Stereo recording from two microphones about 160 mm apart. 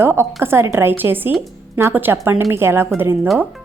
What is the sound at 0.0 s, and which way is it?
Speech, 15° right (ahead or behind).